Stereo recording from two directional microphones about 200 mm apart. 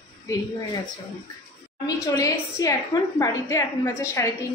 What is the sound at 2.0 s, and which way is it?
A woman's voice, 20° left (ahead or behind).